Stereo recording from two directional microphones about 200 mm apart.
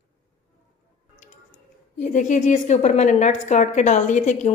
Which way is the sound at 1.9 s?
40° left (ahead or behind).